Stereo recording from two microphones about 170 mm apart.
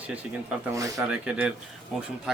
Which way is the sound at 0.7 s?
20° right (ahead or behind).